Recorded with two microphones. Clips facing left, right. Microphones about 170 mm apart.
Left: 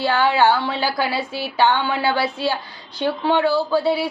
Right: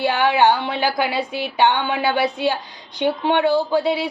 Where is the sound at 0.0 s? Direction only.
20° right (ahead or behind).